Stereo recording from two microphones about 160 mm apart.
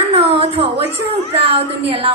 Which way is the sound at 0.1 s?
35° right (ahead or behind).